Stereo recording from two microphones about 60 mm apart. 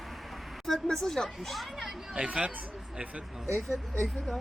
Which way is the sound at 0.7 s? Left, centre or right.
Centre.